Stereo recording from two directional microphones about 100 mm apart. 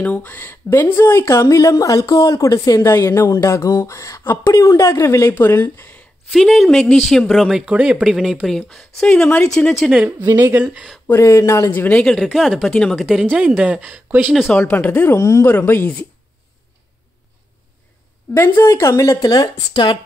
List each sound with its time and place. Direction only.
0.0 s speech: 15° left (ahead or behind)
6.2 s speech: centre (ahead or behind)
9.8 s speech: 5° right (ahead or behind)
10.3 s speech: 15° right (ahead or behind)
11.1 s speech: 30° left (ahead or behind)
12.0 s speech: 5° left (ahead or behind)
13.1 s speech: 10° right (ahead or behind)
14.5 s speech: 15° left (ahead or behind)
15.1 s speech: 35° left (ahead or behind)
15.4 s speech: 20° left (ahead or behind)
18.3 s speech: 25° left (ahead or behind)
19.2 s speech: 40° left (ahead or behind)